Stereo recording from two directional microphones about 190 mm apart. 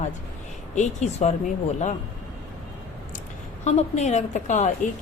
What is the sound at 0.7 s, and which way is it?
Speech, 35° left (ahead or behind).